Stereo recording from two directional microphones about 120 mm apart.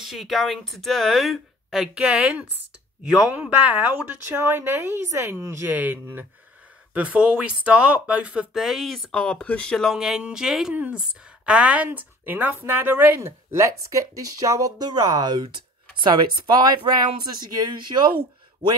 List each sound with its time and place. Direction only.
0.0 s speech: centre (ahead or behind); by 18.1 s 40° right (ahead or behind)